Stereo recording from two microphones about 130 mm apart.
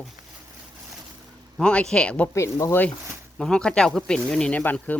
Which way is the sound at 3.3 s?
5° left (ahead or behind).